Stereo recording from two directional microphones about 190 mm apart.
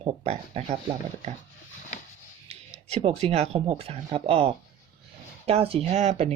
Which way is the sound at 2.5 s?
30° right (ahead or behind).